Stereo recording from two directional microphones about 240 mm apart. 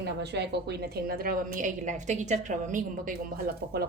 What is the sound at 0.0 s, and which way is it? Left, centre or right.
A woman's voice, right.